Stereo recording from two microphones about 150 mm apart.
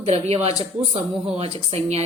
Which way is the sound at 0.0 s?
45° right (ahead or behind).